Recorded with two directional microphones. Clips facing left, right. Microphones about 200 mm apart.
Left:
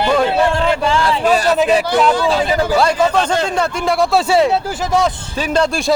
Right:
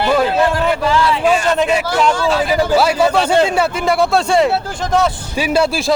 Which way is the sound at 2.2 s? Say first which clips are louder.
Even; centre (ahead or behind).